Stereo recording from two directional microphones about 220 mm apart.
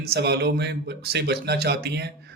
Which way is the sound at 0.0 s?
50° right (ahead or behind).